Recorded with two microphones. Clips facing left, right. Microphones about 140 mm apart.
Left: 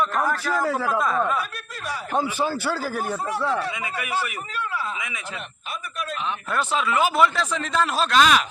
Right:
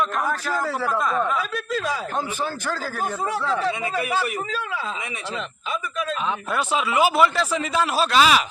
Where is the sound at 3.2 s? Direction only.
90° right.